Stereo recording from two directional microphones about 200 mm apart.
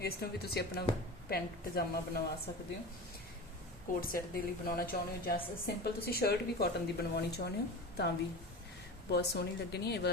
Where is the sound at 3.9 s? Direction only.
45° left (ahead or behind).